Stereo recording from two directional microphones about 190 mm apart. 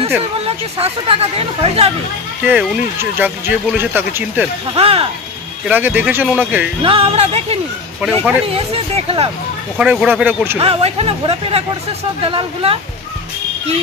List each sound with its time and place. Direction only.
0.2 s speech: 30° right (ahead or behind)
2.4 s speech: 10° right (ahead or behind)
4.7 s speech: 30° right (ahead or behind)
5.7 s speech: 10° right (ahead or behind)
6.8 s speech: 30° right (ahead or behind)
8.5 s speech: 30° right (ahead or behind)
9.8 s speech: 5° right (ahead or behind)
10.6 s speech: 30° right (ahead or behind)